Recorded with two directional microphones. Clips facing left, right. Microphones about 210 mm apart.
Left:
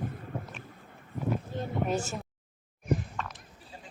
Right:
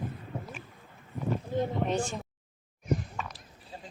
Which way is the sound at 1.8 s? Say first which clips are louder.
Right 1 dB; 5° left (ahead or behind).